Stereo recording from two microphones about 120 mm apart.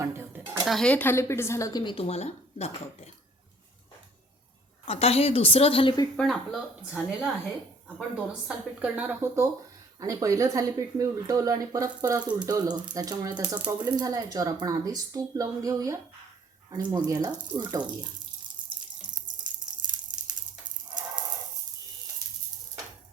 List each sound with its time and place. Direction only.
0.0 s dishes: 20° right (ahead or behind)
0.6 s speech: centre (ahead or behind); by 1.8 s 25° left (ahead or behind)
1.8 s speech: 40° left (ahead or behind)
2.0 s speech: 60° left (ahead or behind)
4.9 s speech: 60° left (ahead or behind)
6.1 s a woman's voice: centre (ahead or behind); by 18.1 s 35° right (ahead or behind)
19.0 s a sound: 40° right (ahead or behind)